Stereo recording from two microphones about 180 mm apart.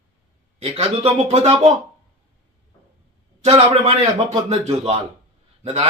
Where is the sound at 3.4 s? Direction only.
35° right (ahead or behind).